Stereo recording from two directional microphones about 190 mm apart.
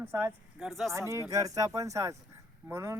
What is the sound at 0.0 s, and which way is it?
Speech, 10° right (ahead or behind).